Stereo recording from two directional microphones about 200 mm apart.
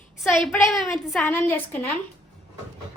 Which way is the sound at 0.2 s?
Centre (ahead or behind).